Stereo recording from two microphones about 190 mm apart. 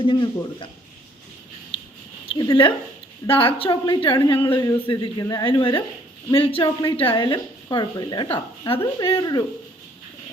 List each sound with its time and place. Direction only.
0.0 s a woman's voice: 25° left (ahead or behind)
2.2 s a woman's voice: 25° left (ahead or behind)